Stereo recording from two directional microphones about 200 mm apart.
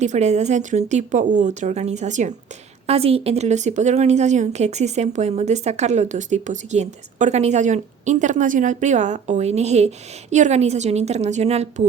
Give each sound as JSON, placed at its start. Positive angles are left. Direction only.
{"t": 0.0, "sound": "a woman's voice", "side_deg": -35}